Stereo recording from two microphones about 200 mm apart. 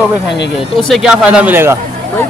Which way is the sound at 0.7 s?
Centre (ahead or behind).